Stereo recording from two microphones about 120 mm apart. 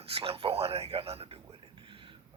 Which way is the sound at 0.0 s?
55° right (ahead or behind).